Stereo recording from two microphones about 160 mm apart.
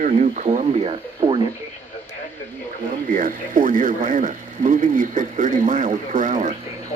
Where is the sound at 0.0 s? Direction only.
55° right (ahead or behind).